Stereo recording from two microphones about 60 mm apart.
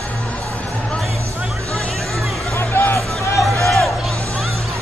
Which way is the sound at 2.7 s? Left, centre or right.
Left.